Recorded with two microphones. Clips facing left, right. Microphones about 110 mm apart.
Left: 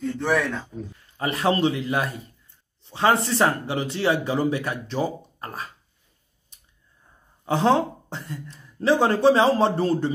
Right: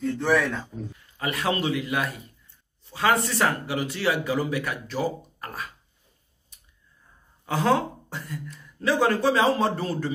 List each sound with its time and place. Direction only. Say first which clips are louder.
0.0 s speech: even; centre (ahead or behind)
1.1 s a man's voice: left 4 dB; 35° left (ahead or behind)
7.4 s a man's voice: left 3 dB; 30° left (ahead or behind)